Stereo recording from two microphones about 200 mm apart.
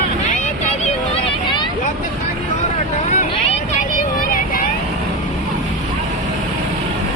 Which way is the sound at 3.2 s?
40° left (ahead or behind).